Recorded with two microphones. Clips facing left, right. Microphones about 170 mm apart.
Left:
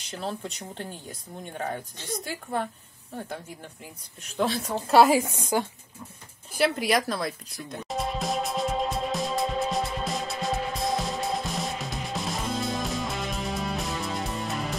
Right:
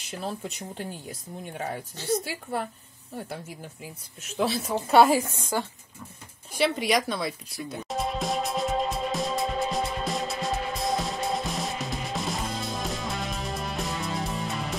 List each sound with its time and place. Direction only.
0.1 s speech: 5° right (ahead or behind)
3.8 s speech: 5° right (ahead or behind)
5.2 s a woman's voice: 15° left (ahead or behind)
6.5 s music: centre (ahead or behind)